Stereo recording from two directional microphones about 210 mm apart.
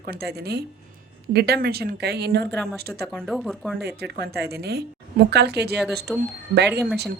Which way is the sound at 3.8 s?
50° right (ahead or behind).